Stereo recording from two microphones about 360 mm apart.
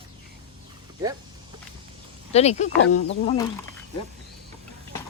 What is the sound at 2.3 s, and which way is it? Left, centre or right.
Speech, centre.